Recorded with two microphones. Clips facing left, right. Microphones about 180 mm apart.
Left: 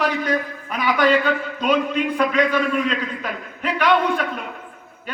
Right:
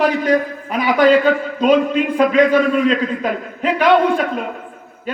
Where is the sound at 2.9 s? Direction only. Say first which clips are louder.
Right 8 dB; 45° right (ahead or behind).